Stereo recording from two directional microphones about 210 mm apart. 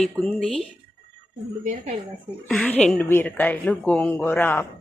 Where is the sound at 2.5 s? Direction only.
5° left (ahead or behind).